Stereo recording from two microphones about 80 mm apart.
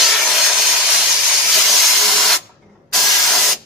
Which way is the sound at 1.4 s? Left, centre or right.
Centre.